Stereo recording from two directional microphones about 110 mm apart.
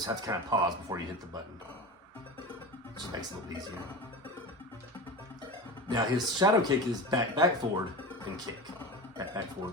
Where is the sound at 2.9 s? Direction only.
35° right (ahead or behind).